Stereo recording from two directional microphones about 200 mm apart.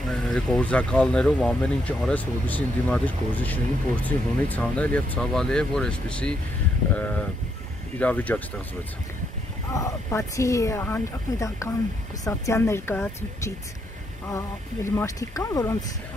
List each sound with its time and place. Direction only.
0.1 s speech: centre (ahead or behind)
8.0 s speech: 10° left (ahead or behind)
9.7 s speech: 15° left (ahead or behind)